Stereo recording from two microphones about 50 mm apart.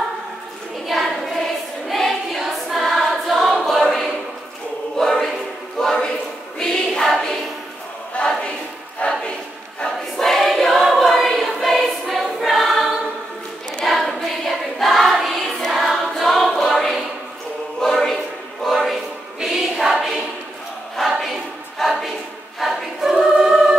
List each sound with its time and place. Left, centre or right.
0.8 s child singing: centre
1.9 s choir: centre
5.8 s a sound: centre
6.6 s choir: centre
8.2 s choir: left
9.0 s a sound: left
9.8 s choir: centre
13.8 s choir: centre
19.4 s choir: centre